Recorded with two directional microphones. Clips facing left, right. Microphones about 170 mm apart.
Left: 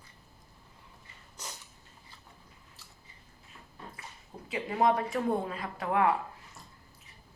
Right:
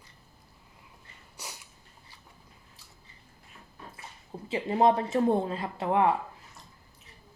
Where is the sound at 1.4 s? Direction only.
10° right (ahead or behind).